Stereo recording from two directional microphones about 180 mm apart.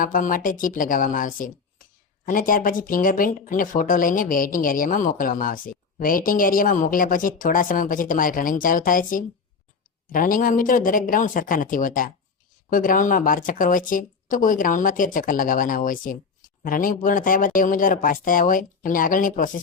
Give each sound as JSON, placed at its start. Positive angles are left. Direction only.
{"t": 0.0, "sound": "a woman's voice", "side_deg": 50}